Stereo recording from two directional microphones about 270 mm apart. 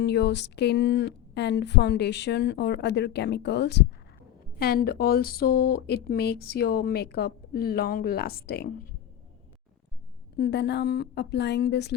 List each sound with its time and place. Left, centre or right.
0.0 s speech: left
10.3 s speech: left